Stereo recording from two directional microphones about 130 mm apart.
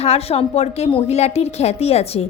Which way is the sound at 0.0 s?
50° left (ahead or behind).